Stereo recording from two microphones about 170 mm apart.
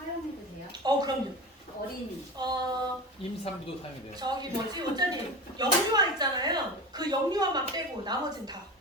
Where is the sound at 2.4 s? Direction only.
25° right (ahead or behind).